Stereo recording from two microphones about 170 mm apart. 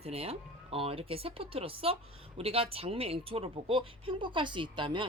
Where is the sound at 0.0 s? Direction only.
35° right (ahead or behind).